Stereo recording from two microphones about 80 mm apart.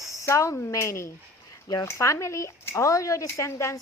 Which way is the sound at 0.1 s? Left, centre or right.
Left.